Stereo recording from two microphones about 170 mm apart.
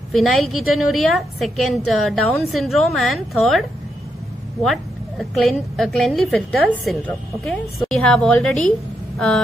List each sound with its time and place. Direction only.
0.1 s a woman's voice: centre (ahead or behind)
5.3 s a woman's voice: centre (ahead or behind)